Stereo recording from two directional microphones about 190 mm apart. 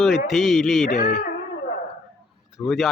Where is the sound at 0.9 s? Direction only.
60° left (ahead or behind).